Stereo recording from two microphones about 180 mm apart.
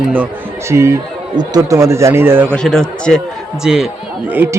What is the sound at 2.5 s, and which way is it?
Speech, 5° left (ahead or behind).